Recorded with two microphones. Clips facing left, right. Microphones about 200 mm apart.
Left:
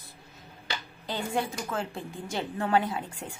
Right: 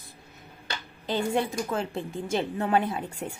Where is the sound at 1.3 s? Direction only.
20° right (ahead or behind).